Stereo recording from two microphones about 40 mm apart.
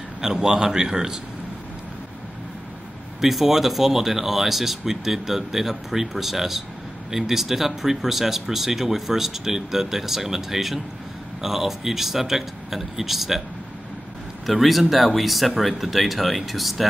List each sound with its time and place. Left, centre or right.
0.2 s speech: centre
3.2 s speech: centre
14.4 s speech: centre